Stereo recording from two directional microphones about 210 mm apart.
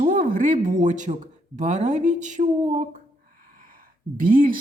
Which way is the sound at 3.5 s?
40° right (ahead or behind).